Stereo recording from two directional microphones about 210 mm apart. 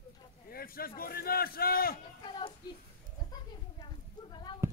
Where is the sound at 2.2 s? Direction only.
25° left (ahead or behind).